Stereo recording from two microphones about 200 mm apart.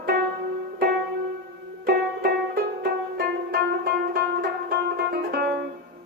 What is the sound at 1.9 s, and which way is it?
Music, 50° right (ahead or behind).